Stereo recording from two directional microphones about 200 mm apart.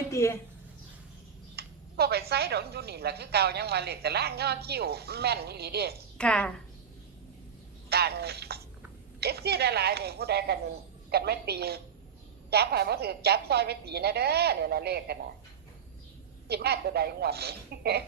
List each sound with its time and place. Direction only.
0.1 s a woman's voice: 15° left (ahead or behind)
1.5 s a sound: 50° right (ahead or behind)
2.3 s a woman's voice: 55° right (ahead or behind)
6.1 s a woman's voice: 5° left (ahead or behind)
7.9 s a woman's voice: 55° right (ahead or behind)
16.5 s a woman's voice: 55° right (ahead or behind)